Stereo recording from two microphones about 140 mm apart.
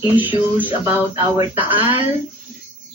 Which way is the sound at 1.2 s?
25° right (ahead or behind).